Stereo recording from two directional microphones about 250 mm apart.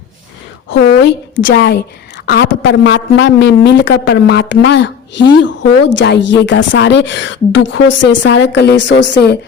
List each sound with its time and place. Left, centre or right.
0.7 s a woman's voice: left